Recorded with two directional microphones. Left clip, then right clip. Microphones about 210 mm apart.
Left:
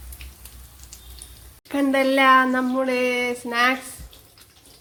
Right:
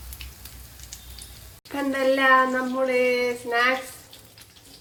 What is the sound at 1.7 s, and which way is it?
Speech, 45° left (ahead or behind).